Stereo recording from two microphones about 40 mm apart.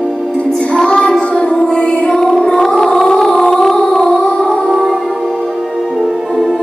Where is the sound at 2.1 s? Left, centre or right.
Centre.